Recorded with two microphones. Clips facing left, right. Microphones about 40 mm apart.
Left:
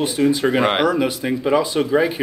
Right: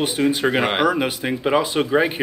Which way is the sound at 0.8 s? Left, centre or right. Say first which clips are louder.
Left 1 dB; right.